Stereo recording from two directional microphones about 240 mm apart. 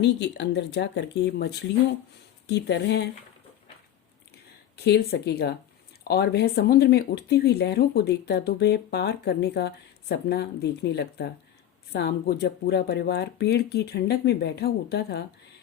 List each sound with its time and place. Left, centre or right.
0.0 s speech: left
4.8 s speech: left